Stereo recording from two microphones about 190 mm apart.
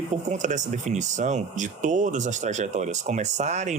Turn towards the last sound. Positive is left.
turn(degrees=-35)  # may be behind; listen again after turning